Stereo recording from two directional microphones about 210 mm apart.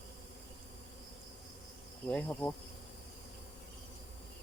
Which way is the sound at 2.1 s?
10° left (ahead or behind).